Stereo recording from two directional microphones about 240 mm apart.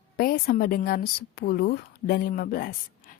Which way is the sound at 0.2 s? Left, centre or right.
Left.